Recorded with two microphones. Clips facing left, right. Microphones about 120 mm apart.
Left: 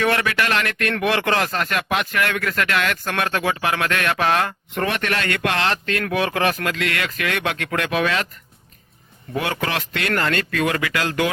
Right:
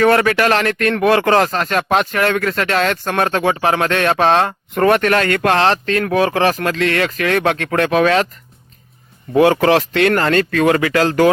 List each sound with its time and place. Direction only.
0.0 s speech: 40° right (ahead or behind)
4.8 s speech: 45° right (ahead or behind)
9.3 s speech: 30° right (ahead or behind)